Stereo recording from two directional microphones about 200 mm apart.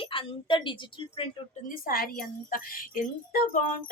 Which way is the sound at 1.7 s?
45° left (ahead or behind).